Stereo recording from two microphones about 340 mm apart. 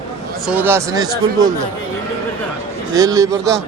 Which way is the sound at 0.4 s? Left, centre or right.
Centre.